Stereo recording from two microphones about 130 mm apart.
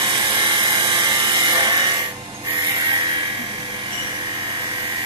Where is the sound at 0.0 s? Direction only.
40° right (ahead or behind).